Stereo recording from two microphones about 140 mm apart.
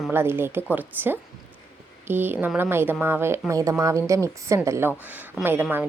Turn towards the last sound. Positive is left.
turn(degrees=-15)  # may be behind; listen again after turning